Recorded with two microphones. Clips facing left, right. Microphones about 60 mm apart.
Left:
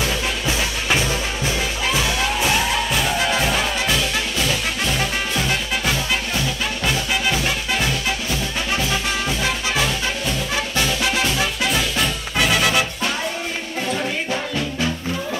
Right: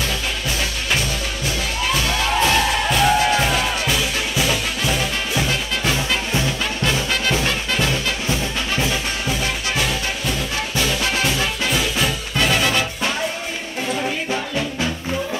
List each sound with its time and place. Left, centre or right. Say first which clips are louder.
0.5 s music: left 2 dB; centre
2.0 s music: right 2 dB; centre
3.9 s music: even; centre
7.1 s music: right 1 dB; centre
11.2 s music: even; centre
12.4 s music: left 1 dB; centre